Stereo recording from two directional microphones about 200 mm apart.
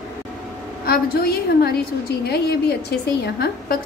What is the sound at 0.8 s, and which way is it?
A woman's voice, 50° left (ahead or behind).